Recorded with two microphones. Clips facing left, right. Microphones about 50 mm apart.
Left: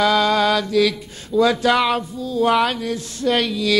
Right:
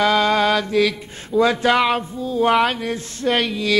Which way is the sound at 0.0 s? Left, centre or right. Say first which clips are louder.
Even; right.